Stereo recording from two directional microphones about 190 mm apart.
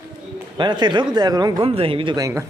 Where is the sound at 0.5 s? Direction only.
25° right (ahead or behind).